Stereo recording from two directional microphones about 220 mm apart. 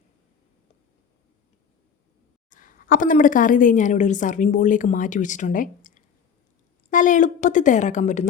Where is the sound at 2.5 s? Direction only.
35° left (ahead or behind).